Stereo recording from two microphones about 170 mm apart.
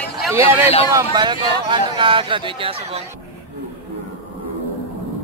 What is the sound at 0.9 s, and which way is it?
Speech, 20° right (ahead or behind).